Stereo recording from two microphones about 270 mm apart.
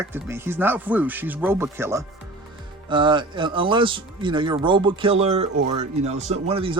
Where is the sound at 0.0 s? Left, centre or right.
Centre.